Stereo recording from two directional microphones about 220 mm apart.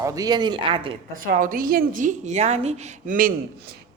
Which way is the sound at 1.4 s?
40° right (ahead or behind).